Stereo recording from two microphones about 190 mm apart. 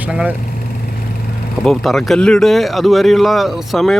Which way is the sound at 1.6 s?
Centre (ahead or behind).